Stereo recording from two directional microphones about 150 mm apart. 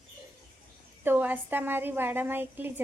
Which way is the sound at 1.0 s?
15° right (ahead or behind).